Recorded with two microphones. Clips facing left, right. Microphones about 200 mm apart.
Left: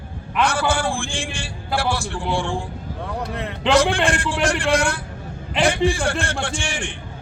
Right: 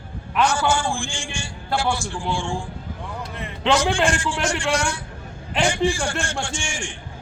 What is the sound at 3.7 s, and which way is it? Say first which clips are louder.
A man's voice: left 3 dB; 60° left (ahead or behind).